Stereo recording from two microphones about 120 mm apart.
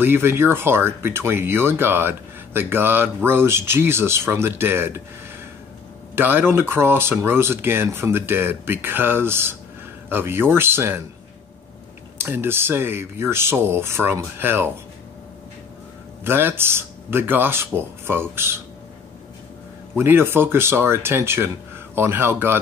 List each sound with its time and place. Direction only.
0.0 s speech: 20° right (ahead or behind)
6.1 s speech: 15° right (ahead or behind)
12.2 s speech: 20° right (ahead or behind)
16.3 s speech: 20° right (ahead or behind)
20.0 s speech: 20° right (ahead or behind)